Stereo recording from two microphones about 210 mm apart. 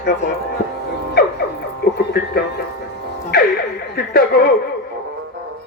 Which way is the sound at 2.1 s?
50° left (ahead or behind).